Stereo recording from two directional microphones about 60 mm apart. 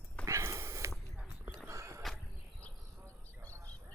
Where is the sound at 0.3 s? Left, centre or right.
Right.